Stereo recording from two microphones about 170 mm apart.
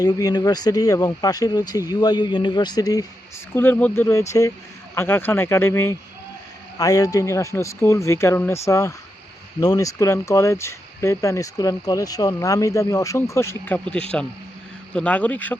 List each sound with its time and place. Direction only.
0.0 s speech: 20° left (ahead or behind)